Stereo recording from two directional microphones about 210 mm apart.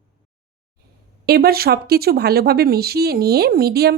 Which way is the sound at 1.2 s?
45° right (ahead or behind).